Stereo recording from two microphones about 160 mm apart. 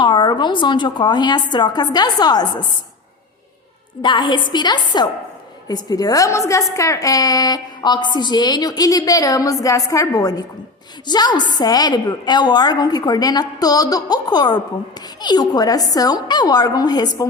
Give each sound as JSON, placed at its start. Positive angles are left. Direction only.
{"t": 0.0, "sound": "a woman's voice", "side_deg": 30}
{"t": 4.0, "sound": "a woman's voice", "side_deg": 30}